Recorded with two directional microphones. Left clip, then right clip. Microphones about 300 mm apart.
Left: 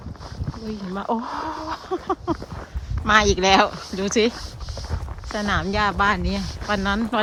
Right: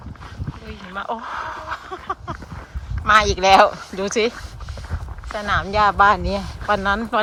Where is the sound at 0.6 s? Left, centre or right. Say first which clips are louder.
Even; centre.